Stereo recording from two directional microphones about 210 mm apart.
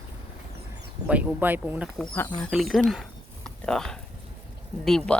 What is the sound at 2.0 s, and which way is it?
A woman's voice, 10° left (ahead or behind).